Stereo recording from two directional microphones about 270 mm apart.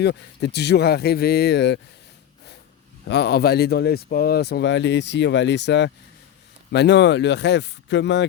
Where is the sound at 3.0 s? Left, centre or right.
Left.